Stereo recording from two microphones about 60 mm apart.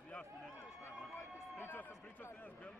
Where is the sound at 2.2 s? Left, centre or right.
Left.